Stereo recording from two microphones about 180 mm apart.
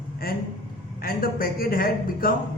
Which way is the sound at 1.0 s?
55° left (ahead or behind).